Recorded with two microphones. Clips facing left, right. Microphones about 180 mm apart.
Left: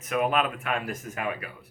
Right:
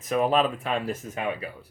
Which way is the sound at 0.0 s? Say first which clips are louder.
Right 3 dB; 35° right (ahead or behind).